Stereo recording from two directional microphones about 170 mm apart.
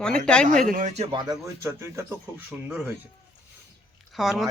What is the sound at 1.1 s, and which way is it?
Speech, 25° right (ahead or behind).